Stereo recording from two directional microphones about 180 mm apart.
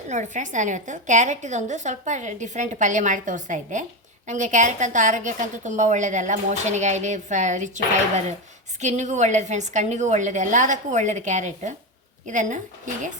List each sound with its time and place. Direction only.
0.1 s a woman's voice: 45° right (ahead or behind)
8.8 s a woman's voice: 40° right (ahead or behind)